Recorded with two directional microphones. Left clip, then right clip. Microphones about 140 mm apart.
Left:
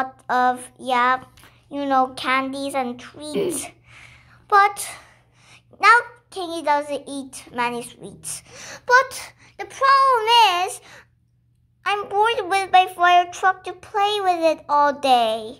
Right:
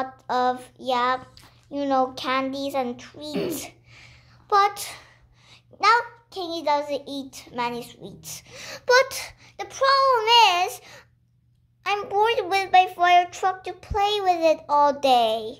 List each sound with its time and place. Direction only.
0.0 s a child's voice: 10° left (ahead or behind)
3.3 s speech: 35° right (ahead or behind)
3.6 s a sound: 10° left (ahead or behind)
5.5 s a child's voice: 10° left (ahead or behind)
8.6 s a child's voice: 15° right (ahead or behind)